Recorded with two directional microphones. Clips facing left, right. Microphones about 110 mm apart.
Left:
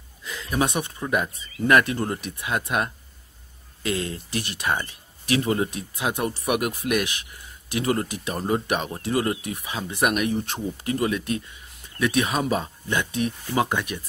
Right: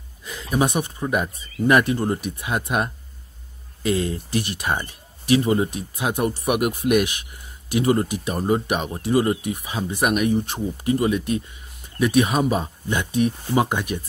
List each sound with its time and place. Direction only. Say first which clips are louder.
1.0 s speech: right 2 dB; 10° right (ahead or behind)
3.9 s speech: right 5 dB; 20° right (ahead or behind)
5.9 s speech: right 3 dB; 10° right (ahead or behind)
6.7 s speech: right 5 dB; 20° right (ahead or behind)
8.9 s speech: right 4 dB; 20° right (ahead or behind)
9.9 s speech: right 3 dB; 5° right (ahead or behind)